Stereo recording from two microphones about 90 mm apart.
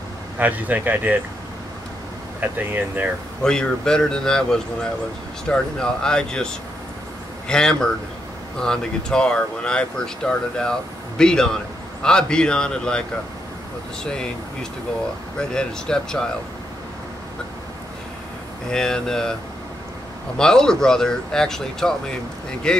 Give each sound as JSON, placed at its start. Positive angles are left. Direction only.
{"t": 0.4, "sound": "speech", "side_deg": -20}
{"t": 2.4, "sound": "speech", "side_deg": -20}
{"t": 3.4, "sound": "speech", "side_deg": 10}
{"t": 15.5, "sound": "speech", "side_deg": 5}
{"t": 18.7, "sound": "speech", "side_deg": 5}
{"t": 20.3, "sound": "speech", "side_deg": 5}